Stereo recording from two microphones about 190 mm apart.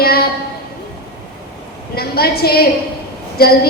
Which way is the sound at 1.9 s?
55° left (ahead or behind).